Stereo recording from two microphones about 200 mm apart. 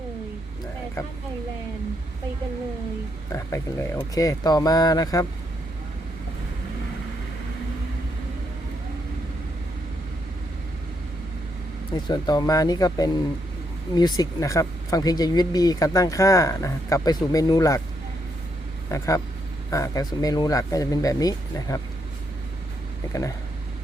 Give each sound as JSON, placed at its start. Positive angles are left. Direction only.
{"t": 3.3, "sound": "speech", "side_deg": 15}
{"t": 11.9, "sound": "speech", "side_deg": 20}
{"t": 18.9, "sound": "speech", "side_deg": 15}